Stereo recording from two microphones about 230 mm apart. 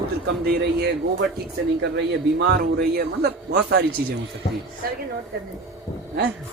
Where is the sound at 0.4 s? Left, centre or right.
Right.